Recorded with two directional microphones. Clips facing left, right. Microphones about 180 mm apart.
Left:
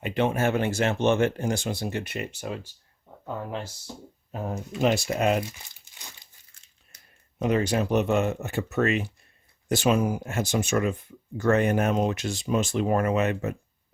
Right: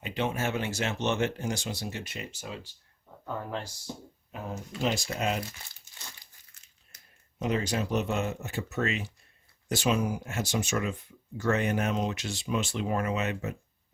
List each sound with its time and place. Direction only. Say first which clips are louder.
0.0 s speech: left 6 dB; 55° left (ahead or behind)
4.3 s speech: left 6 dB; 40° left (ahead or behind)
4.8 s speech: left 7 dB; 60° left (ahead or behind)
5.5 s crumpling: left 3 dB; 15° left (ahead or behind)
7.3 s speech: left 5 dB; 60° left (ahead or behind)